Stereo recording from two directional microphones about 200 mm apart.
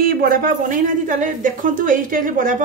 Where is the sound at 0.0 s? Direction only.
45° right (ahead or behind).